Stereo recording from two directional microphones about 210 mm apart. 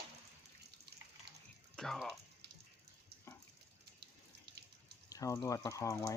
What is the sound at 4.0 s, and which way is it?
Water tap, 50° right (ahead or behind).